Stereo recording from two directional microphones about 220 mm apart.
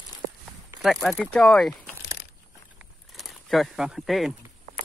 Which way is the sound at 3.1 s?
Centre (ahead or behind).